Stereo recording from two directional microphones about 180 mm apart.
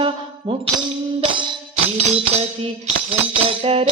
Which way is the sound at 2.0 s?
40° right (ahead or behind).